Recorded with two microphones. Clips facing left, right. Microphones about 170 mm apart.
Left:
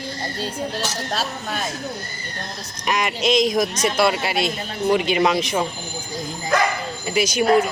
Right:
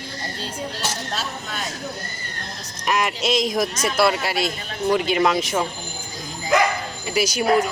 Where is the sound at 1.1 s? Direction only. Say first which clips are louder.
Left 4 dB; 60° left (ahead or behind).